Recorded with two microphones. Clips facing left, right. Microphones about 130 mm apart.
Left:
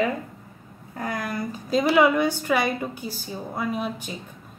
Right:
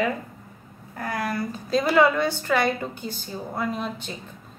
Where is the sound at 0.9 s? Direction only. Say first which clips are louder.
Right 1 dB; 15° left (ahead or behind).